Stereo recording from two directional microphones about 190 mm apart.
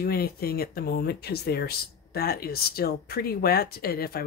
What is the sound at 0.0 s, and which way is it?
Speech, 55° left (ahead or behind).